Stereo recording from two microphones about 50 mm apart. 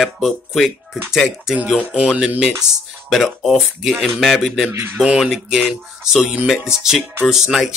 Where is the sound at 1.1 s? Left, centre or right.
Centre.